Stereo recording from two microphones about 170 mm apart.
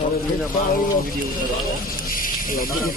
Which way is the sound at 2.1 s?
55° left (ahead or behind).